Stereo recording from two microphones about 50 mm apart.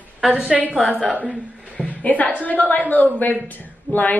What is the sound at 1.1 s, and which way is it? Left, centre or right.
Speech, right.